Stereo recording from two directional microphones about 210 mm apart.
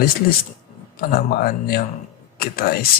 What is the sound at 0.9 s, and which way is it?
Speech, 45° left (ahead or behind).